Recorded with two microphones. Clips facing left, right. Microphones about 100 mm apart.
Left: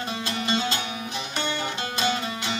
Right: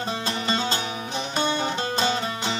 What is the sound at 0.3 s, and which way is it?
Music, 35° right (ahead or behind).